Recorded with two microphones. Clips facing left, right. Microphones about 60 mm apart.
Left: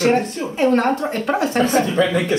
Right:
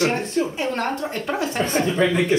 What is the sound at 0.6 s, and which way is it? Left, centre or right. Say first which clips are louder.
Speech: left 7 dB; centre.